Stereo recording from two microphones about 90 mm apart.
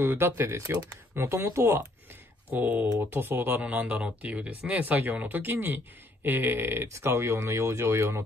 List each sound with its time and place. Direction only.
0.0 s speech: 25° right (ahead or behind)
2.5 s speech: 15° right (ahead or behind)